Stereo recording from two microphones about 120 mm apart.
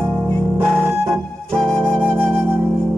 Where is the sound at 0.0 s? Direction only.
10° left (ahead or behind).